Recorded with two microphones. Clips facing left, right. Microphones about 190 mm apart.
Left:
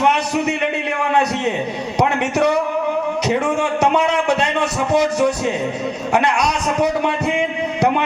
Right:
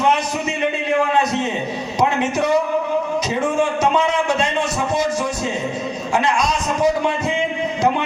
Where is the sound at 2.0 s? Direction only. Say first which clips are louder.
Left 2 dB; 65° left (ahead or behind).